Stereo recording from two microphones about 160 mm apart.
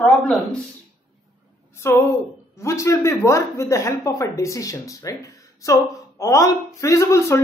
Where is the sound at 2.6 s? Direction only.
20° left (ahead or behind).